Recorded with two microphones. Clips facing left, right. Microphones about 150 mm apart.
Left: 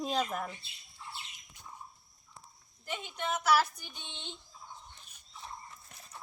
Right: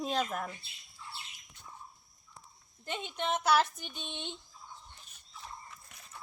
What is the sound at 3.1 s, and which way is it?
A woman's voice, 25° right (ahead or behind).